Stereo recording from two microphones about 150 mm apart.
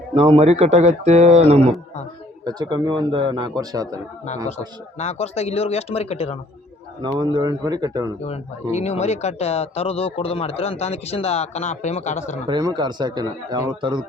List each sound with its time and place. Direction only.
0.1 s speech: 35° right (ahead or behind)
2.4 s a man's voice: 25° right (ahead or behind)
4.9 s speech: 45° left (ahead or behind)
7.0 s a man's voice: 30° right (ahead or behind)
8.2 s speech: 45° left (ahead or behind)
12.5 s a man's voice: 30° right (ahead or behind)